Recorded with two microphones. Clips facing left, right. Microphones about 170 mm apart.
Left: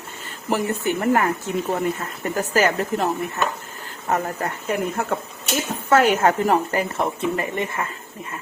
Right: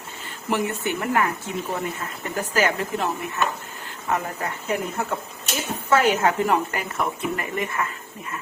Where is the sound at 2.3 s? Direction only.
45° left (ahead or behind).